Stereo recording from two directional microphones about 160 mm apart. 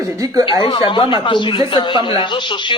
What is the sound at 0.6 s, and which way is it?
A woman's voice, 30° left (ahead or behind).